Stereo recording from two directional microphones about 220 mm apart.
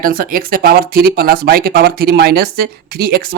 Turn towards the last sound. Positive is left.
turn(degrees=-45)  # may be behind; listen again after turning